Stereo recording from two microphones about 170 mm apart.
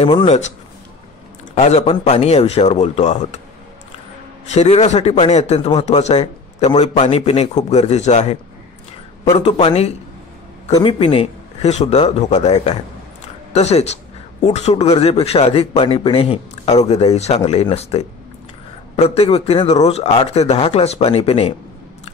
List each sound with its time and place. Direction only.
1.5 s a man's voice: 40° left (ahead or behind)
4.5 s speech: 40° left (ahead or behind)